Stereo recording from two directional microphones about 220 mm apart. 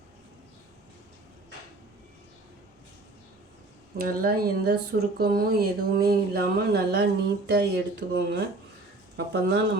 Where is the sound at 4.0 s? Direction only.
45° right (ahead or behind).